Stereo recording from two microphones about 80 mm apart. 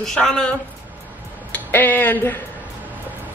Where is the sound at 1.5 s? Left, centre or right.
Left.